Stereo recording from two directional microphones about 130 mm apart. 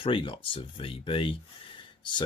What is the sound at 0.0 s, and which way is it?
Speech, 40° left (ahead or behind).